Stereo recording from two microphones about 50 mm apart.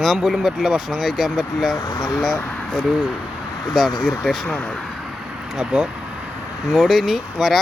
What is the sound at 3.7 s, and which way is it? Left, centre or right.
Speech, centre.